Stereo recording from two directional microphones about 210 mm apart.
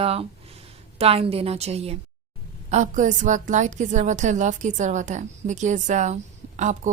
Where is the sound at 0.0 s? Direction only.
25° right (ahead or behind).